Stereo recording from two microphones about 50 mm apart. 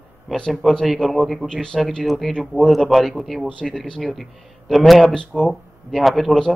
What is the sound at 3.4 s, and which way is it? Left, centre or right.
Speech, centre.